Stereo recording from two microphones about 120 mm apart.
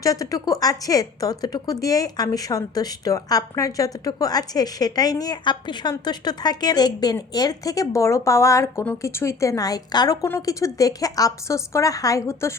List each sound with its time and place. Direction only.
0.0 s a woman's voice: 30° left (ahead or behind)